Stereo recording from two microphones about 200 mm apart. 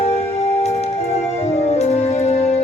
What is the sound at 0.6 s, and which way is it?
Music, 35° left (ahead or behind).